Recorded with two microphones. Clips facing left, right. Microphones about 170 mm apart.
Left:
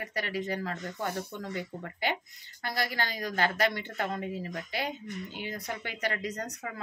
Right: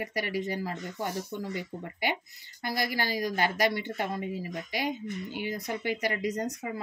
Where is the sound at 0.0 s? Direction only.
10° right (ahead or behind).